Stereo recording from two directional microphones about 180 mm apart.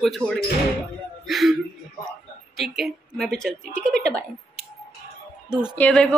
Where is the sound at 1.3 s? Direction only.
Centre (ahead or behind).